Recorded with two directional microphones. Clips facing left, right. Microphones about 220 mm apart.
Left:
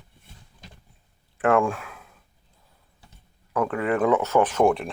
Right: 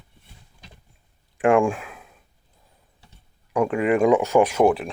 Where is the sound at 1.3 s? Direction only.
15° right (ahead or behind).